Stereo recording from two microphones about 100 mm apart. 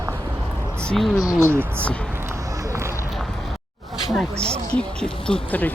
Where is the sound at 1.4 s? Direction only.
25° right (ahead or behind).